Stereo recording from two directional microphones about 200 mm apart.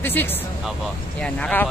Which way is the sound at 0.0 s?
10° left (ahead or behind).